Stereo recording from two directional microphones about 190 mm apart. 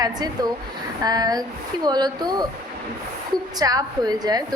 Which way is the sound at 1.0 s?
20° right (ahead or behind).